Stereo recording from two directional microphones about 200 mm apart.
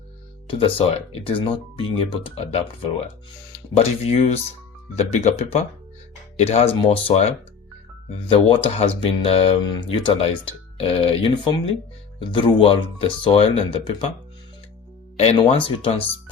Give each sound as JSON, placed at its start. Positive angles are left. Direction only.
{"t": 0.4, "sound": "speech", "side_deg": 25}
{"t": 15.2, "sound": "speech", "side_deg": 30}